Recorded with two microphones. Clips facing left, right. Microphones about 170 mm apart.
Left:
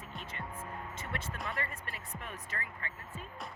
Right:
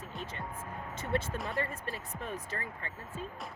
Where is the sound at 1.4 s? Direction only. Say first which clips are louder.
Right 4 dB; centre (ahead or behind).